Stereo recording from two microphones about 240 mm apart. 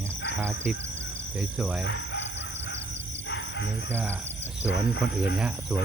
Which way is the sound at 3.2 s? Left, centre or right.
Left.